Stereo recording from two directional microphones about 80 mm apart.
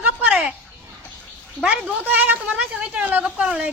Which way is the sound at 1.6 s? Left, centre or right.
Centre.